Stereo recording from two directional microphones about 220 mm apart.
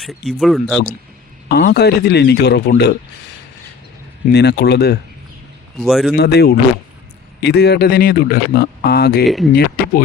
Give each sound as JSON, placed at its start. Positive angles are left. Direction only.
{"t": 0.0, "sound": "speech", "side_deg": 0}
{"t": 1.5, "sound": "speech", "side_deg": 45}
{"t": 4.3, "sound": "speech", "side_deg": 50}
{"t": 5.8, "sound": "speech", "side_deg": 0}
{"t": 6.1, "sound": "speech", "side_deg": 45}
{"t": 9.2, "sound": "speech", "side_deg": 0}
{"t": 9.6, "sound": "a sound", "side_deg": 40}